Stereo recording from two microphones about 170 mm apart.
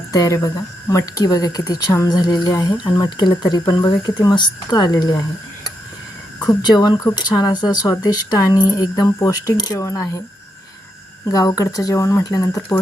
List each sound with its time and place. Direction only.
0.1 s speech: 20° left (ahead or behind)
6.6 s speech: 25° left (ahead or behind)
11.3 s speech: 20° left (ahead or behind)